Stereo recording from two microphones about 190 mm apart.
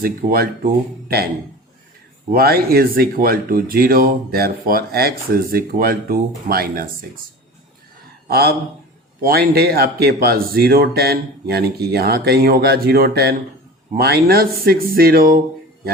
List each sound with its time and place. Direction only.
0.0 s speech: 50° right (ahead or behind)
2.3 s speech: 55° right (ahead or behind)
8.3 s speech: 55° right (ahead or behind)